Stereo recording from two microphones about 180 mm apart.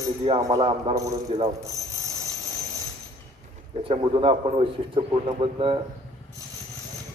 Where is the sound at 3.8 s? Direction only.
30° right (ahead or behind).